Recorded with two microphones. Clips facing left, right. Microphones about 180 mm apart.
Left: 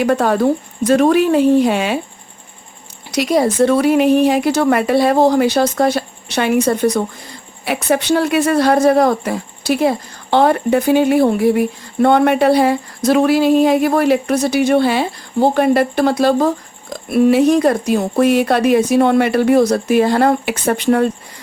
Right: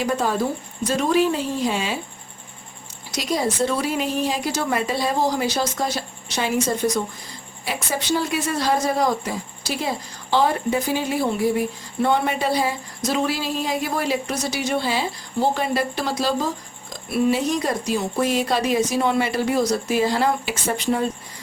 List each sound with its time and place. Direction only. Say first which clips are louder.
0.0 s speech: left 8 dB; 65° left (ahead or behind)
3.1 s speech: left 9 dB; 65° left (ahead or behind)